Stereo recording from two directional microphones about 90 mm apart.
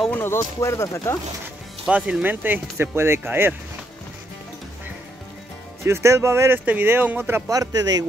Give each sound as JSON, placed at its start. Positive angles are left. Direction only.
{"t": 0.1, "sound": "speech", "side_deg": 25}
{"t": 0.6, "sound": "speech", "side_deg": 35}
{"t": 1.9, "sound": "speech", "side_deg": -10}
{"t": 5.9, "sound": "speech", "side_deg": -30}
{"t": 6.6, "sound": "speech", "side_deg": -20}
{"t": 7.4, "sound": "speech", "side_deg": -40}